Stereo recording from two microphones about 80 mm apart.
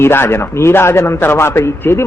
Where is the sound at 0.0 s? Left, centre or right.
Left.